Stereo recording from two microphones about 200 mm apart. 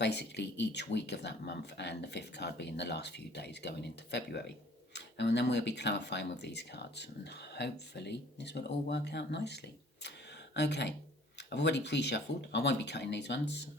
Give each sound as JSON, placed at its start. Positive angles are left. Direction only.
{"t": 0.0, "sound": "speech", "side_deg": 60}